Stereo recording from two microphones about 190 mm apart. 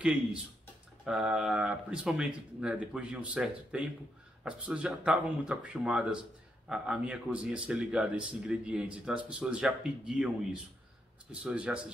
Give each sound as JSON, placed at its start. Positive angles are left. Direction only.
{"t": 1.0, "sound": "speech", "side_deg": -5}